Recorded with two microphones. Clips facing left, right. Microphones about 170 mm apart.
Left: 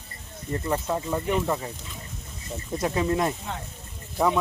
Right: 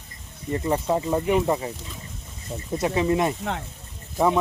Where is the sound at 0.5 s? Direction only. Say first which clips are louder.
Right 4 dB; 15° right (ahead or behind).